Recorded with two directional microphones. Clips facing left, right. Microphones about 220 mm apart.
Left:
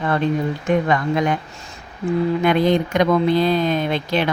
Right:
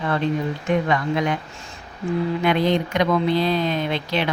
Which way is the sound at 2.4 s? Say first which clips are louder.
Left 2 dB; 45° left (ahead or behind).